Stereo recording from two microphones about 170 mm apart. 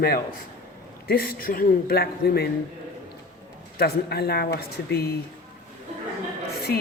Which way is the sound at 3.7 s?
70° left (ahead or behind).